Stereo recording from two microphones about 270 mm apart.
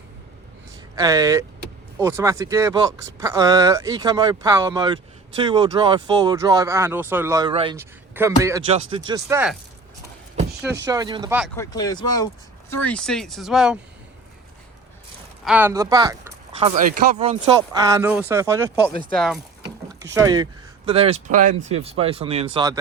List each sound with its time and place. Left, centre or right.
0.9 s speech: centre
10.8 s speech: centre
11.5 s speech: centre
15.4 s speech: centre
19.6 s speech: centre